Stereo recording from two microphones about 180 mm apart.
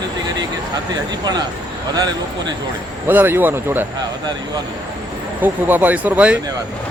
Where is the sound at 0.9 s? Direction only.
20° right (ahead or behind).